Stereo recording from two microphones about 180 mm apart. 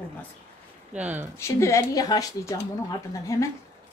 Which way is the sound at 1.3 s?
15° left (ahead or behind).